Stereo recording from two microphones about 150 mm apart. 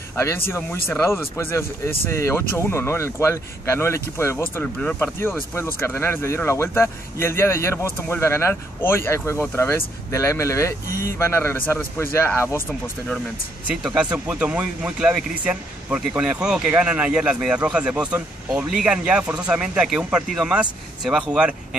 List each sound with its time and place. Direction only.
0.1 s speech: 15° left (ahead or behind)
13.7 s speech: 5° right (ahead or behind)